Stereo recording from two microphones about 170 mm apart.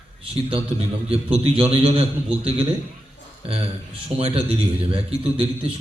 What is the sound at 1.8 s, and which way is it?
A man's voice, 35° right (ahead or behind).